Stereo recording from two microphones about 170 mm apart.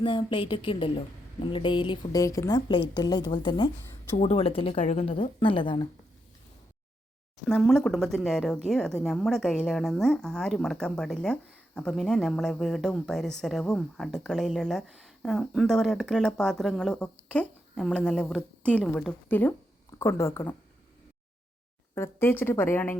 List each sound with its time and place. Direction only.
0.0 s a woman's voice: 30° left (ahead or behind)
7.4 s a woman's voice: 5° left (ahead or behind)
21.9 s a woman's voice: 15° left (ahead or behind)